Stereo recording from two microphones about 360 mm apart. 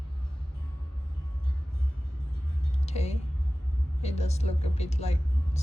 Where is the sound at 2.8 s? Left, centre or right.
Centre.